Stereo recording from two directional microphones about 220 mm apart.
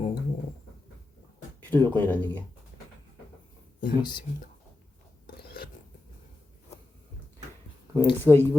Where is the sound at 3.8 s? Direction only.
20° left (ahead or behind).